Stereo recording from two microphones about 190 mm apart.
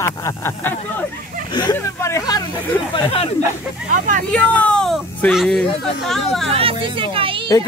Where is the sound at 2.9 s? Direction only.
30° left (ahead or behind).